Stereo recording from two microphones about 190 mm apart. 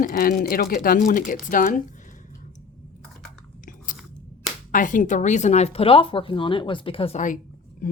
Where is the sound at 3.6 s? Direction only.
45° left (ahead or behind).